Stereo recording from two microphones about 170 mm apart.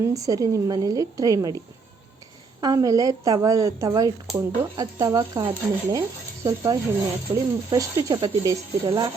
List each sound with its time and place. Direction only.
0.0 s speech: 20° right (ahead or behind)
2.6 s speech: 20° right (ahead or behind)